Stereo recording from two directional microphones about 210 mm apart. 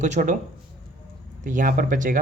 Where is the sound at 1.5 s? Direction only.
40° right (ahead or behind).